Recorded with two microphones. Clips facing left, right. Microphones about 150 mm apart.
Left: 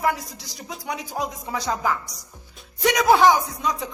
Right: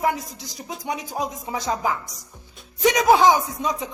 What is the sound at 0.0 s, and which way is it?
Speech, 20° right (ahead or behind).